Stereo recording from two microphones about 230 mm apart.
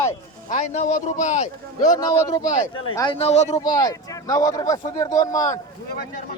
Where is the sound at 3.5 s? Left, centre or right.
Centre.